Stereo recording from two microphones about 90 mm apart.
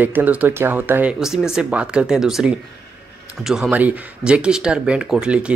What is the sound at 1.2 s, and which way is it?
Speech, 5° right (ahead or behind).